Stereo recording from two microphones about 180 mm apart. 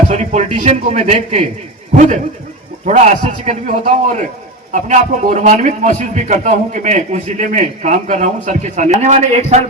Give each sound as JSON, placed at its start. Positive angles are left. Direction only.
{"t": 0.1, "sound": "a man's voice", "side_deg": -40}